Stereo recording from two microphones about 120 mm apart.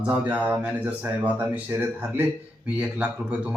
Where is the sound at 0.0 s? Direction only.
10° right (ahead or behind).